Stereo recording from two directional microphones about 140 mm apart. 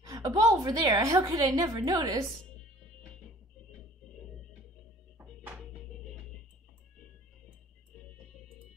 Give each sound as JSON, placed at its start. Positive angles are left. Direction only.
{"t": 0.0, "sound": "a woman's voice", "side_deg": -25}